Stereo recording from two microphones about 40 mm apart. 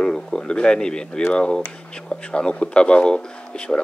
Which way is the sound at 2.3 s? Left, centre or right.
Left.